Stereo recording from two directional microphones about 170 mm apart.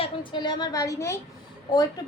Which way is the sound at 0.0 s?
25° left (ahead or behind).